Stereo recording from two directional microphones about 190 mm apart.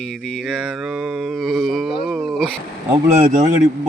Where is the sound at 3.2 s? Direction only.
45° right (ahead or behind).